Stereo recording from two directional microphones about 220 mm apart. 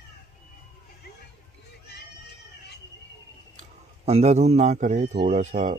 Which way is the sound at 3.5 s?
30° right (ahead or behind).